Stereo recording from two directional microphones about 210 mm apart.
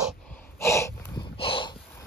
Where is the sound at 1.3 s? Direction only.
25° left (ahead or behind).